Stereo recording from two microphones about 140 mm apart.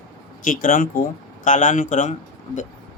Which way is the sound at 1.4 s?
65° left (ahead or behind).